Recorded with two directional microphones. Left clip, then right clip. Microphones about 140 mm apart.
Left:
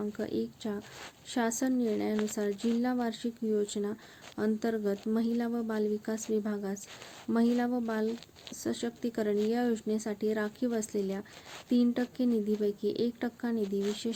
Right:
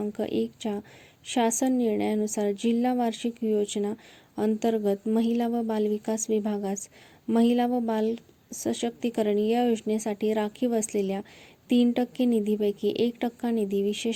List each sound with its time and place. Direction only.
0.1 s speech: 25° right (ahead or behind)